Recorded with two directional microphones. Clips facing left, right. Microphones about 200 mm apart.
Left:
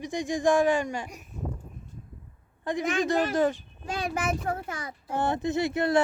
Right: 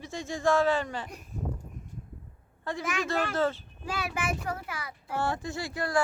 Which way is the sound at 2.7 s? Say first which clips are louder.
Left 5 dB; 15° left (ahead or behind).